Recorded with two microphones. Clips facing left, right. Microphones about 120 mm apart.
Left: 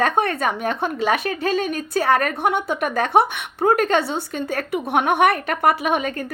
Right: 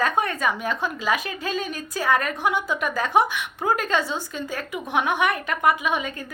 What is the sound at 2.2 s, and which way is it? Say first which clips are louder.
A woman's voice: left 4 dB; 55° left (ahead or behind).